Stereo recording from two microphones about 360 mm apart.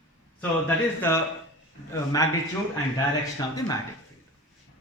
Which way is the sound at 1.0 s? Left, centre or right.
Centre.